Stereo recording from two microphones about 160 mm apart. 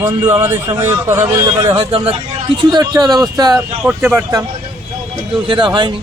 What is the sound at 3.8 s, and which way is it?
Speech, 10° right (ahead or behind).